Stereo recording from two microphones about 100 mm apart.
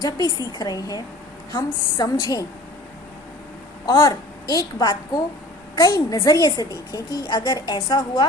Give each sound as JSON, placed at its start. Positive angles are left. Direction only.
{"t": 0.0, "sound": "a woman's voice", "side_deg": 40}
{"t": 3.8, "sound": "a woman's voice", "side_deg": 40}